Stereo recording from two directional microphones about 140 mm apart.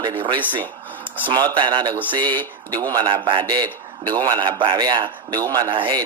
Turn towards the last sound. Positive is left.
turn(degrees=-35)  # may be behind; listen again after turning